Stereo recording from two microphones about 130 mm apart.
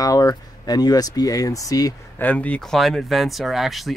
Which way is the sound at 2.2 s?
10° left (ahead or behind).